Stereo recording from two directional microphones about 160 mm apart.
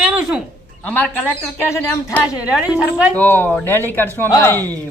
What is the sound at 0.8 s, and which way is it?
Speech, 10° left (ahead or behind).